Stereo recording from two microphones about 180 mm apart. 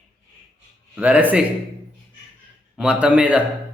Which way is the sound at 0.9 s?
10° right (ahead or behind).